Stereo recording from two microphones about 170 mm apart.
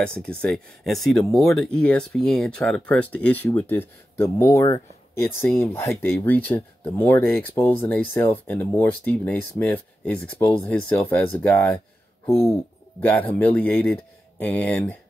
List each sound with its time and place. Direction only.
0.0 s speech: 5° left (ahead or behind)